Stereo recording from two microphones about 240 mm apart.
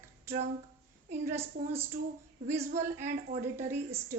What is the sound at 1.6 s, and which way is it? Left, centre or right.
A woman's voice, right.